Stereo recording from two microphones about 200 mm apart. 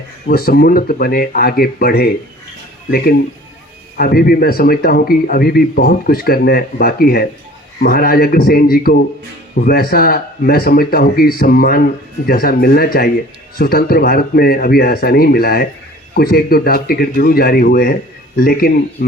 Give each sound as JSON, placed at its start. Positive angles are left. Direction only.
{"t": 0.3, "sound": "speech", "side_deg": 50}